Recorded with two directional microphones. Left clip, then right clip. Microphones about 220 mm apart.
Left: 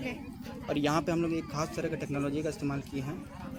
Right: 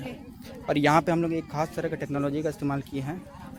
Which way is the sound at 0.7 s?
50° right (ahead or behind).